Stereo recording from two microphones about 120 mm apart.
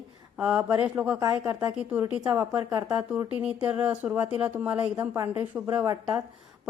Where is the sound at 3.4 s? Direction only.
10° right (ahead or behind).